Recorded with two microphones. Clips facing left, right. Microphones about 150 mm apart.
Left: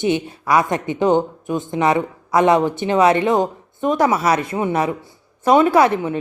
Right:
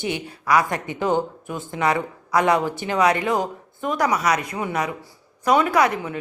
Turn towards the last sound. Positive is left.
turn(degrees=25)  # may be behind; listen again after turning